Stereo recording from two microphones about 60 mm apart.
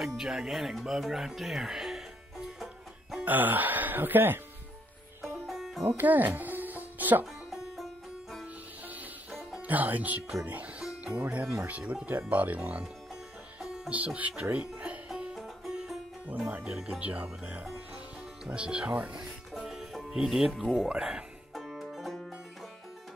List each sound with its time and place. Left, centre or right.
0.2 s music: centre
3.3 s speech: right
5.2 s music: centre
5.9 s music: right
7.5 s music: centre
8.8 s music: right
9.6 s speech: right
10.4 s music: right
11.1 s speech: right
12.8 s music: centre
13.8 s speech: right
15.3 s music: centre
16.6 s speech: centre
19.6 s music: centre